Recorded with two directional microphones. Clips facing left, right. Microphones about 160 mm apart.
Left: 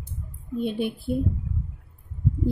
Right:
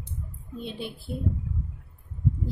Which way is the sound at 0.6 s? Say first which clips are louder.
Left 9 dB; 55° left (ahead or behind).